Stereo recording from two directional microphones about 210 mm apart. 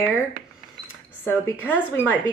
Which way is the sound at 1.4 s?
10° left (ahead or behind).